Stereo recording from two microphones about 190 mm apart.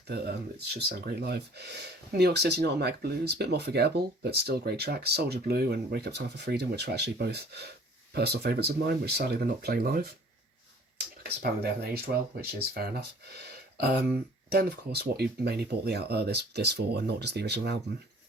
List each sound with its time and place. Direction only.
0.1 s speech: 55° right (ahead or behind)
11.2 s speech: 55° right (ahead or behind)
14.5 s speech: 55° right (ahead or behind)